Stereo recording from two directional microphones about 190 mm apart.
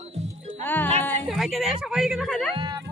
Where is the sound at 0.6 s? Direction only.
10° left (ahead or behind).